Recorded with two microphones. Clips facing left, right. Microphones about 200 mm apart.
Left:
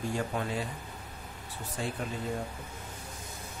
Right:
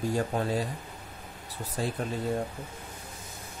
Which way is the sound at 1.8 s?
40° right (ahead or behind).